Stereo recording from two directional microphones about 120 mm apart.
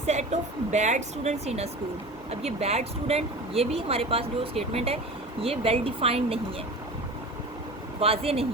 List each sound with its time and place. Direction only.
0.0 s speech: 70° right (ahead or behind); by 6.4 s 55° right (ahead or behind)
7.9 s speech: 55° right (ahead or behind)